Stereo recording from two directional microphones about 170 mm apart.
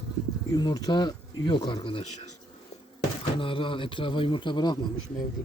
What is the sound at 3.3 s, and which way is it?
Speech, 30° left (ahead or behind).